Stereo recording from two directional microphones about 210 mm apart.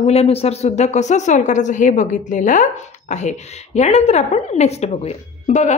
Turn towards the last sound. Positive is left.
turn(degrees=30)  # may be behind; listen again after turning